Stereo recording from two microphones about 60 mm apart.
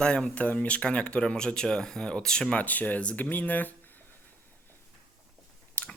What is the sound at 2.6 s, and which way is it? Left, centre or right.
Speech, left.